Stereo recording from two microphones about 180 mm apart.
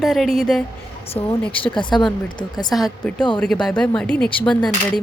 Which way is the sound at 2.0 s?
Centre (ahead or behind).